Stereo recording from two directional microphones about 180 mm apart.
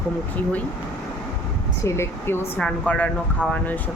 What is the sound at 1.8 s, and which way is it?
Speech, 15° left (ahead or behind).